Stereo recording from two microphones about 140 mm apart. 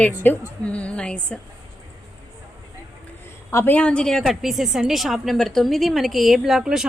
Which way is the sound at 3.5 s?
15° left (ahead or behind).